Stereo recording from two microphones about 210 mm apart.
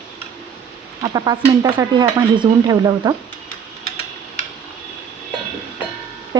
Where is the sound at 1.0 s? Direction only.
15° right (ahead or behind).